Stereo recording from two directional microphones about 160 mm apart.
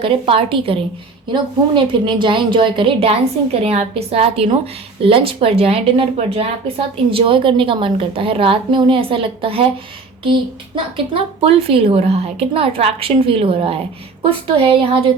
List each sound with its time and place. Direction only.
0.0 s a woman's voice: 35° right (ahead or behind)
10.9 s a woman's voice: 35° right (ahead or behind)